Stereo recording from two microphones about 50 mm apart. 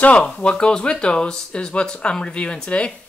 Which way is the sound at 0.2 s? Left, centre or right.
Centre.